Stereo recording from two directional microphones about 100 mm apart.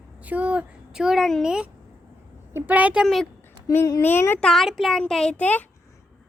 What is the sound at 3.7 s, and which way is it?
Speech, 35° left (ahead or behind).